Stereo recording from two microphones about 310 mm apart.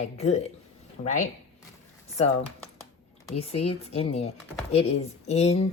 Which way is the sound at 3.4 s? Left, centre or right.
Centre.